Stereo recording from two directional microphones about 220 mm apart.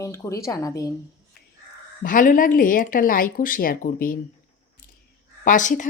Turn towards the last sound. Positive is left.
turn(degrees=35)  # may be behind; listen again after turning